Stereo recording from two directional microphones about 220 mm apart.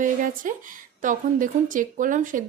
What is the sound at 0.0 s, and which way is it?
A woman's voice, 35° right (ahead or behind).